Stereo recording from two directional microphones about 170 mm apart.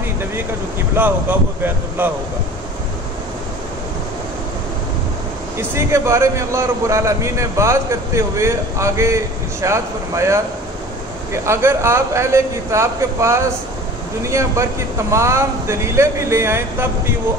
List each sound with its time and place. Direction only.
1.0 s a man's voice: 10° right (ahead or behind)
5.6 s a man's voice: 15° right (ahead or behind)
11.4 s a man's voice: 15° right (ahead or behind)